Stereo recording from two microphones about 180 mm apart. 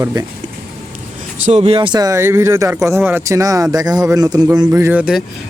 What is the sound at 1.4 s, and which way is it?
Speech, 35° right (ahead or behind).